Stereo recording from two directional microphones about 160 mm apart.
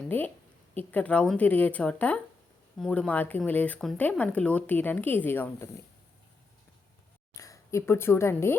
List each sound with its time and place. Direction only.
0.0 s a woman's voice: 10° left (ahead or behind)
7.3 s a woman's voice: 20° left (ahead or behind)